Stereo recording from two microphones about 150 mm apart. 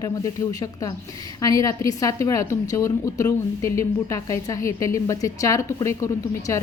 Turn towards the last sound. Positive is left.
turn(degrees=20)  # may be behind; listen again after turning